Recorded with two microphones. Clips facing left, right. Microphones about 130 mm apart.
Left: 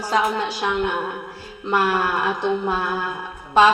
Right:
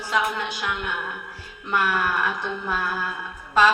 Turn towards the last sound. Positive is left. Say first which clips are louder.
# left 4 dB
turn(degrees=25)  # may be behind; listen again after turning